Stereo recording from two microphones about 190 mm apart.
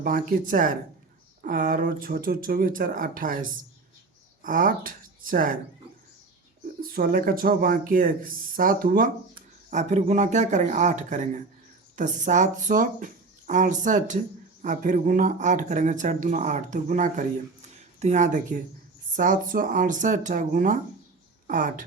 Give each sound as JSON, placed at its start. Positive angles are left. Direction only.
{"t": 0.0, "sound": "speech", "side_deg": -45}
{"t": 6.9, "sound": "speech", "side_deg": -50}